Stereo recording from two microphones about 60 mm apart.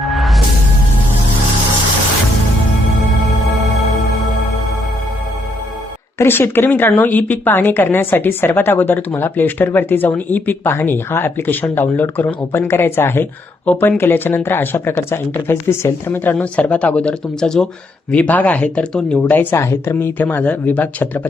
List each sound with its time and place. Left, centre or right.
0.0 s music: centre
6.1 s a woman's voice: left
16.4 s speech: left
18.1 s speech: left
18.9 s speech: centre
19.3 s a woman's voice: left
19.5 s a woman's voice: left